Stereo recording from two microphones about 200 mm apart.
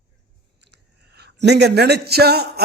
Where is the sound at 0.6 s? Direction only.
55° right (ahead or behind).